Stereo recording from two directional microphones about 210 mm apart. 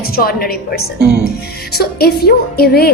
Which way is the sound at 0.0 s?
45° left (ahead or behind).